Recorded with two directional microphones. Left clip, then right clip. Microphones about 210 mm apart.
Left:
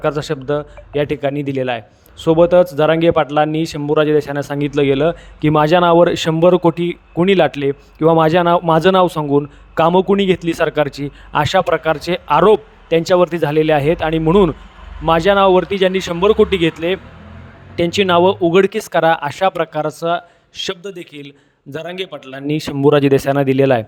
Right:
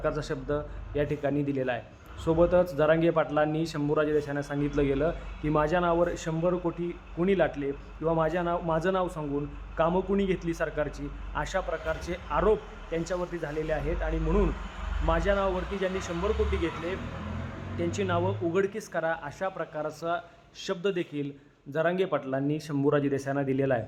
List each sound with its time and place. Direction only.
0.0 s a man's voice: 40° left (ahead or behind)